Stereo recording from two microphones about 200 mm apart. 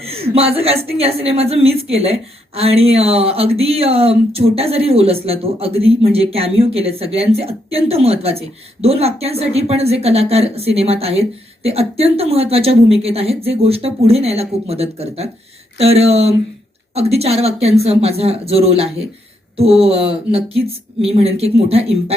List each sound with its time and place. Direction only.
0.0 s speech: 30° right (ahead or behind)